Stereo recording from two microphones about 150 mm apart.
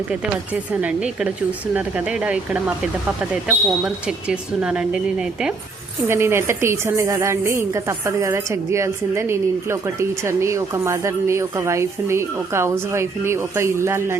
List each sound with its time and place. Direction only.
0.1 s speech: 10° right (ahead or behind)
6.1 s a woman's voice: 15° right (ahead or behind)